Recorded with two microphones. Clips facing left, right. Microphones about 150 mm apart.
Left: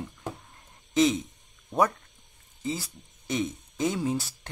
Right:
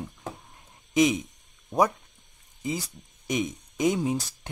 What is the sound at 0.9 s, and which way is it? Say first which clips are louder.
Speech: right 1 dB; 15° right (ahead or behind).